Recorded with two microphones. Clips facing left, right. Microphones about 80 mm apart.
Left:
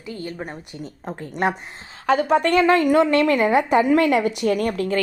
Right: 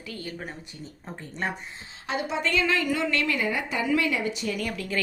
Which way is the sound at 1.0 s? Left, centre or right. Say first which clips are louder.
Left 9 dB; left.